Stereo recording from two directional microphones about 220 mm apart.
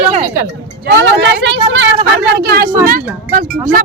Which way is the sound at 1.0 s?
55° right (ahead or behind).